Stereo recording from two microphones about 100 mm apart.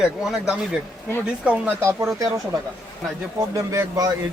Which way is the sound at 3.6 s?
35° right (ahead or behind).